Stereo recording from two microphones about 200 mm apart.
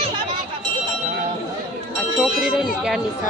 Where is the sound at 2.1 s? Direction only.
5° right (ahead or behind).